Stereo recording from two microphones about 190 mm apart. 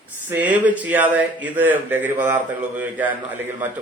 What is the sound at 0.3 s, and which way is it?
Speech, 10° right (ahead or behind).